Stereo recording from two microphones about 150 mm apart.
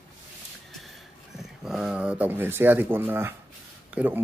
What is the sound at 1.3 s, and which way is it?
Speech, centre (ahead or behind).